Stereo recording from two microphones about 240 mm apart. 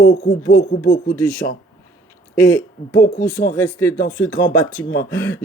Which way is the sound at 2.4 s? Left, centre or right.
Centre.